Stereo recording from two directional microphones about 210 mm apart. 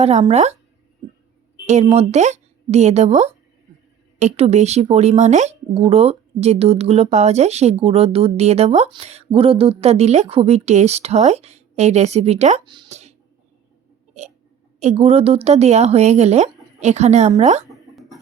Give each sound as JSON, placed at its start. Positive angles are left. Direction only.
{"t": 0.0, "sound": "speech", "side_deg": -30}
{"t": 1.6, "sound": "a woman's voice", "side_deg": -30}
{"t": 14.8, "sound": "speech", "side_deg": -30}
{"t": 17.7, "sound": "a sound", "side_deg": 0}